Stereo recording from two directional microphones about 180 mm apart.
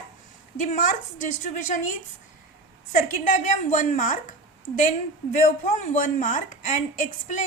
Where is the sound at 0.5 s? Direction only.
50° left (ahead or behind).